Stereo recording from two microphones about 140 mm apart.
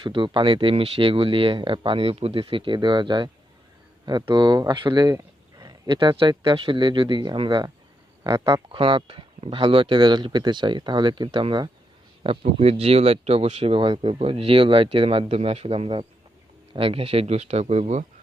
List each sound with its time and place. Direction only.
0.0 s speech: 35° right (ahead or behind)